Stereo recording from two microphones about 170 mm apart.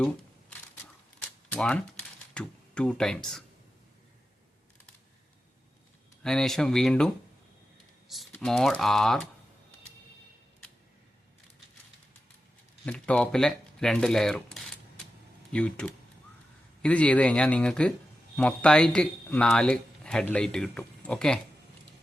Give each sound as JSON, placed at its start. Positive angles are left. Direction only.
{"t": 1.2, "sound": "a sound", "side_deg": 5}
{"t": 2.3, "sound": "speech", "side_deg": 5}
{"t": 6.2, "sound": "speech", "side_deg": 5}
{"t": 8.0, "sound": "typing", "side_deg": 0}
{"t": 8.3, "sound": "speech", "side_deg": 5}
{"t": 12.8, "sound": "speech", "side_deg": 10}